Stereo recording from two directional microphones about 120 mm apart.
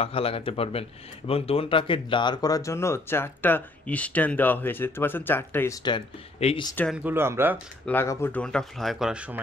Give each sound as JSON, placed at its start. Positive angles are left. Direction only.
{"t": 0.0, "sound": "speech", "side_deg": 55}
{"t": 6.4, "sound": "speech", "side_deg": 55}
{"t": 7.0, "sound": "speech", "side_deg": -15}
{"t": 7.8, "sound": "speech", "side_deg": 20}
{"t": 8.4, "sound": "speech", "side_deg": 5}